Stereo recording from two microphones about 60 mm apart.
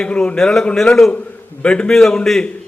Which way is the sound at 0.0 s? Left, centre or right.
Centre.